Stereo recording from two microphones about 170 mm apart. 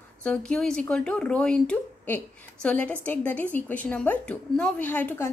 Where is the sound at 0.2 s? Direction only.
5° left (ahead or behind).